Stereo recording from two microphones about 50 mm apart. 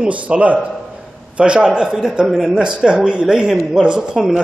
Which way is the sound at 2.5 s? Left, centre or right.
Centre.